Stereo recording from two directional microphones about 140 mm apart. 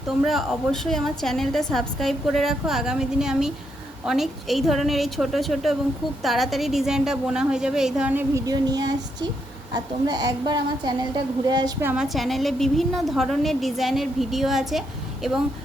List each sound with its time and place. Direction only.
0.1 s a woman's voice: centre (ahead or behind)
8.4 s a woman's voice: 25° right (ahead or behind)
11.9 s a woman's voice: centre (ahead or behind)